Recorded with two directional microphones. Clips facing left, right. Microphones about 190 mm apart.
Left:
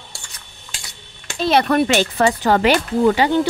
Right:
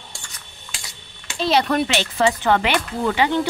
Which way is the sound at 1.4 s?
55° left (ahead or behind).